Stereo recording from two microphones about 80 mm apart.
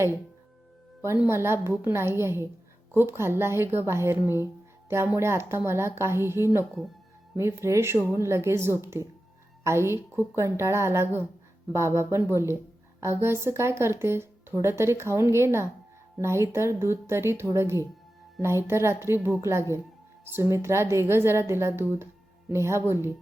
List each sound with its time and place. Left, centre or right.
1.3 s a woman's voice: right